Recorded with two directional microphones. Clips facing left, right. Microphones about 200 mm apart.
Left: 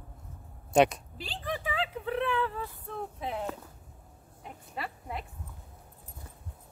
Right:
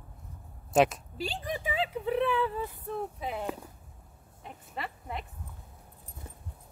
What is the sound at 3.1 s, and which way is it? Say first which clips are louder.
Speech: even; 5° right (ahead or behind).